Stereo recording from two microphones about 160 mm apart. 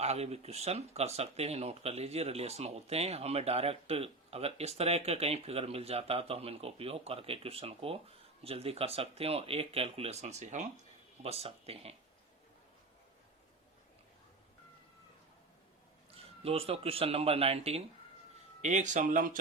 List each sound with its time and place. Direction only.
0.0 s speech: 40° right (ahead or behind)
16.1 s speech: 40° right (ahead or behind); by 19.4 s 60° right (ahead or behind)